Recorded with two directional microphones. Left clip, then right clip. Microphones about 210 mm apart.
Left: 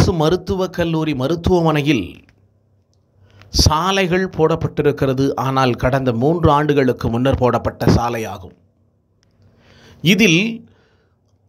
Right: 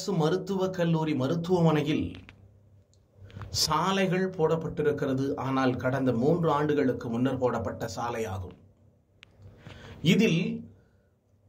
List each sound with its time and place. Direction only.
0.0 s speech: 35° left (ahead or behind)
3.4 s speech: 30° left (ahead or behind)
9.8 s a man's voice: 35° left (ahead or behind)